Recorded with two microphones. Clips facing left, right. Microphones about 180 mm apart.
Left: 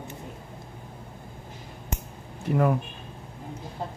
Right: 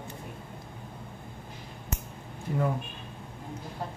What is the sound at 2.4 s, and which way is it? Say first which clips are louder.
Speech: left 6 dB; 70° left (ahead or behind).